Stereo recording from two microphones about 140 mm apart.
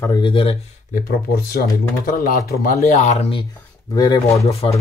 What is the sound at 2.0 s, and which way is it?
Speech, 80° left.